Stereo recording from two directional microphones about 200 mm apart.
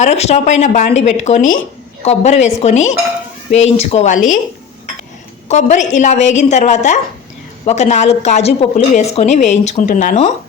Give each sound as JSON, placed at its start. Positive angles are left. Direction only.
{"t": 0.0, "sound": "a woman's voice", "side_deg": 35}
{"t": 5.5, "sound": "a woman's voice", "side_deg": 35}